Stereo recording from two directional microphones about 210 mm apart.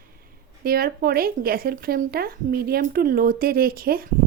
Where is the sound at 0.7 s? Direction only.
45° right (ahead or behind).